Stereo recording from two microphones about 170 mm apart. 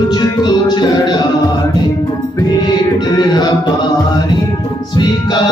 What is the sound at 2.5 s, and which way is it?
Music, 25° left (ahead or behind).